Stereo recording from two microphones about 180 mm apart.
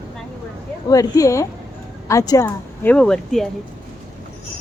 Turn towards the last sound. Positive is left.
turn(degrees=0)  # may be behind; listen again after turning